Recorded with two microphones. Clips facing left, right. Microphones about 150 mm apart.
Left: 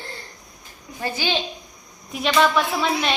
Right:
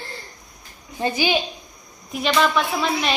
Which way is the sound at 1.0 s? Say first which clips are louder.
Right 4 dB; 15° right (ahead or behind).